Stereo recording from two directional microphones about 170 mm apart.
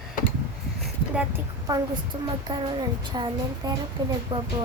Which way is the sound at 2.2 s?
25° right (ahead or behind).